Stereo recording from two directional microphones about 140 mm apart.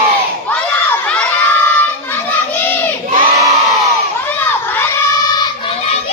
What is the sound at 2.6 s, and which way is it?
Crowd, 15° left (ahead or behind).